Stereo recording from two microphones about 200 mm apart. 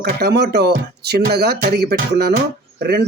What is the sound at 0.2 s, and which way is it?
Speech, 55° right (ahead or behind).